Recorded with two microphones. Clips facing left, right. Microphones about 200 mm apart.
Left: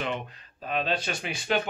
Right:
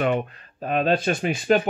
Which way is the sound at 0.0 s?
55° right (ahead or behind).